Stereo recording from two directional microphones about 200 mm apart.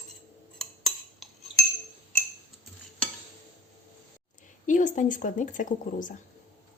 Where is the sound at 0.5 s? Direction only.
Centre (ahead or behind).